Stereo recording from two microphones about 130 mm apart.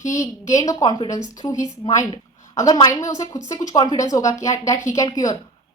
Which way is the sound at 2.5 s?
25° left (ahead or behind).